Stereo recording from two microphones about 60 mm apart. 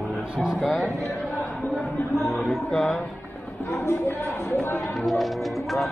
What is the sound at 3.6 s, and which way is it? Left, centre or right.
Speech, left.